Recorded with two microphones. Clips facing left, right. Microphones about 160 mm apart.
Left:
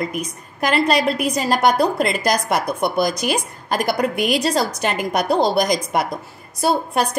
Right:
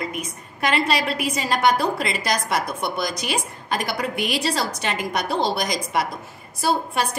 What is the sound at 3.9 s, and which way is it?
Speech, 45° left (ahead or behind).